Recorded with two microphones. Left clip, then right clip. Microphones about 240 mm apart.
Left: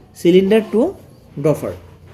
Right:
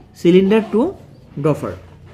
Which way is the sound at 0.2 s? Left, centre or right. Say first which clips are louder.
Left 1 dB; centre.